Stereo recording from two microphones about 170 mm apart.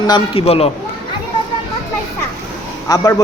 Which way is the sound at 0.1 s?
35° left (ahead or behind).